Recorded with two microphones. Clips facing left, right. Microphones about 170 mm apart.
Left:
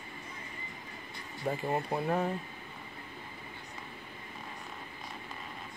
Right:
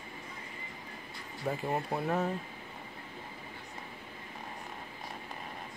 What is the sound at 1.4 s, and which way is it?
Speech, centre (ahead or behind).